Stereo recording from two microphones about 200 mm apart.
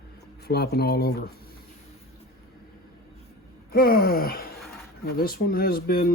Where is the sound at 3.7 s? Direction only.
50° left (ahead or behind).